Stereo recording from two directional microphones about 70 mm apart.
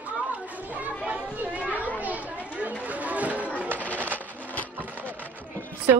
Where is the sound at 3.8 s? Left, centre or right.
Left.